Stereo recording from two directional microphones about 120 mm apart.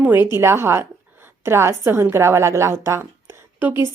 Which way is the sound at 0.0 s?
15° right (ahead or behind).